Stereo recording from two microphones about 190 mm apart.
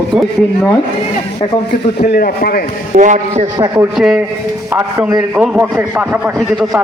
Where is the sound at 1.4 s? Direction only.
35° left (ahead or behind).